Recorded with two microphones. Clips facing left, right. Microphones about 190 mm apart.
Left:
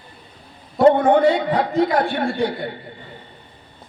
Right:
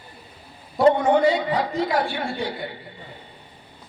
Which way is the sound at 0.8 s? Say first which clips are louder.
Left 3 dB; 55° left (ahead or behind).